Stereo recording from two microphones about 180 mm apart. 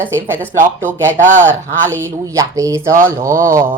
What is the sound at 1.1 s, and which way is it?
Speech, 45° right (ahead or behind).